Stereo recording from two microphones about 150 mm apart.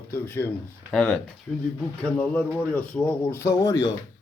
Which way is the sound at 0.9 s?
Centre (ahead or behind).